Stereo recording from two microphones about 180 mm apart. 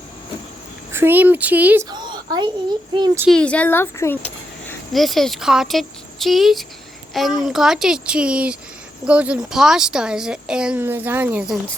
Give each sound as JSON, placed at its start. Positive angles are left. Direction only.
{"t": 0.9, "sound": "speech", "side_deg": -10}
{"t": 1.9, "sound": "a sound", "side_deg": -25}
{"t": 3.2, "sound": "speech", "side_deg": 5}
{"t": 4.9, "sound": "speech", "side_deg": 0}